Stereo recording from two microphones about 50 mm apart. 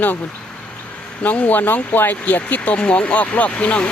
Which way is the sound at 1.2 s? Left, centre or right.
Left.